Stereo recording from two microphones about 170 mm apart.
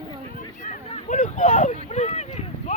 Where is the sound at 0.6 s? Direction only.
45° left (ahead or behind).